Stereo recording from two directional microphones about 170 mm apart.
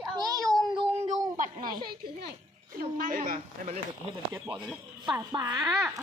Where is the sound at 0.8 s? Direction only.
25° right (ahead or behind).